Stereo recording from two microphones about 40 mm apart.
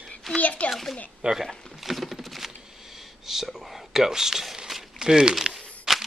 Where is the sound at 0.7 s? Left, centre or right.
Centre.